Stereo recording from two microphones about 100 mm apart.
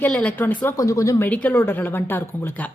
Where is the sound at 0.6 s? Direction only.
30° left (ahead or behind).